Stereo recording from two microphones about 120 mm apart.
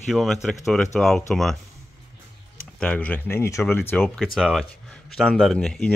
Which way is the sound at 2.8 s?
10° left (ahead or behind).